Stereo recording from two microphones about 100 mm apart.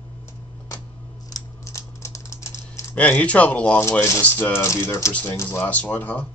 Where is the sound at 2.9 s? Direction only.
15° left (ahead or behind).